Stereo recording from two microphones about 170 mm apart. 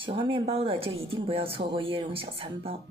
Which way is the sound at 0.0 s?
30° right (ahead or behind).